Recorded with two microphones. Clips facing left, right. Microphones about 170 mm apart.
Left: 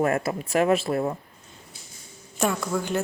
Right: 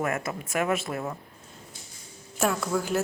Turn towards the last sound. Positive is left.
turn(degrees=-5)  # may be behind; listen again after turning